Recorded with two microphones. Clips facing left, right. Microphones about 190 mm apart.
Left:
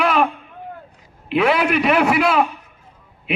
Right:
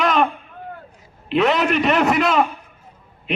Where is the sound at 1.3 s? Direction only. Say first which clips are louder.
Even; 10° left (ahead or behind).